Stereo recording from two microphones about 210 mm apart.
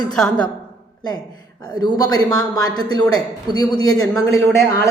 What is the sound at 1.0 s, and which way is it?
A woman's voice, 20° left (ahead or behind).